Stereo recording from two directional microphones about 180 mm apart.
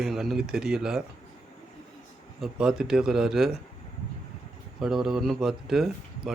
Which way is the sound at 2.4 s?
5° right (ahead or behind).